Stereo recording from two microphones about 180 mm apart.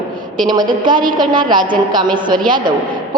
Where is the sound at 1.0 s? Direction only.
25° right (ahead or behind).